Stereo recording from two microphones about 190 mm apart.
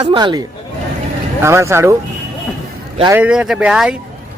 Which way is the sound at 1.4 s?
15° right (ahead or behind).